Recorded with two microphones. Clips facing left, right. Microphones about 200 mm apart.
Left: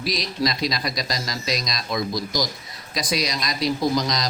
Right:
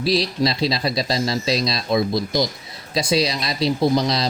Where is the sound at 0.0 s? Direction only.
30° right (ahead or behind).